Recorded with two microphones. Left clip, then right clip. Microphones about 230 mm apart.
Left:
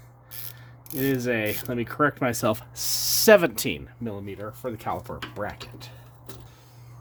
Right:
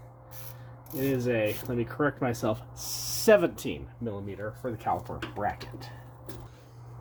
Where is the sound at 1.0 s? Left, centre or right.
Left.